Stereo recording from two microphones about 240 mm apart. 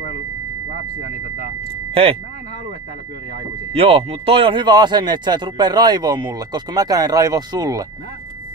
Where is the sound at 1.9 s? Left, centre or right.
Right.